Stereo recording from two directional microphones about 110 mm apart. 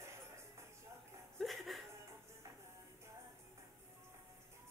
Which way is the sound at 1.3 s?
Centre (ahead or behind).